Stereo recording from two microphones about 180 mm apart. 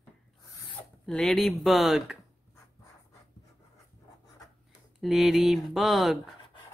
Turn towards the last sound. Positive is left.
turn(degrees=0)  # may be behind; listen again after turning